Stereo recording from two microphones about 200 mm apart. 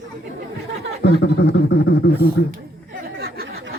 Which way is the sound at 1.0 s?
55° left (ahead or behind).